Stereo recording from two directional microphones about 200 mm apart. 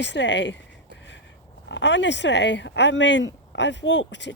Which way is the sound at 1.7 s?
65° left (ahead or behind).